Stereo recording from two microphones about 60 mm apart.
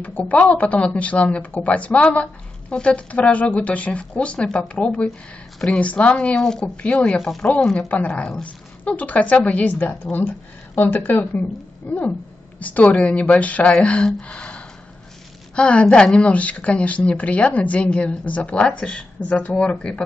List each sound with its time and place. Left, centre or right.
0.0 s a woman's voice: left
11.1 s a woman's voice: left